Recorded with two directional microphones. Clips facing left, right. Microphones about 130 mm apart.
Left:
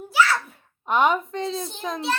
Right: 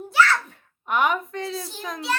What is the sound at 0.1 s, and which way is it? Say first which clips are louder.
Babbling: right 1 dB; 5° left (ahead or behind).